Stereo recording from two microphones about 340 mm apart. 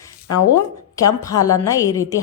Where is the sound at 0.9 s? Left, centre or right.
Centre.